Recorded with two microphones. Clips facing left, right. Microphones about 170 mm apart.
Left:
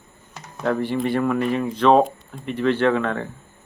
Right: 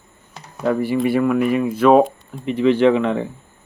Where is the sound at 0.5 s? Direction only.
10° right (ahead or behind).